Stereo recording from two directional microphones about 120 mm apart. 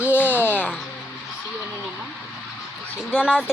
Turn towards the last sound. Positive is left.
turn(degrees=-10)  # may be behind; listen again after turning